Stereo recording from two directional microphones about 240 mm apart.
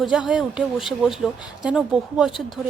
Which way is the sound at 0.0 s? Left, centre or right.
Centre.